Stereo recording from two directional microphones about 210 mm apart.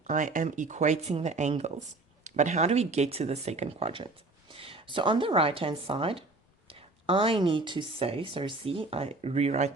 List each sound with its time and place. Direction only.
0.1 s speech: 40° right (ahead or behind)
4.5 s a sound: 25° right (ahead or behind)
4.9 s speech: 25° right (ahead or behind)